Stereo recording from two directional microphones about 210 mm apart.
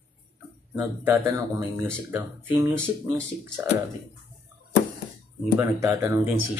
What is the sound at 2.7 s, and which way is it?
Speech, 5° left (ahead or behind).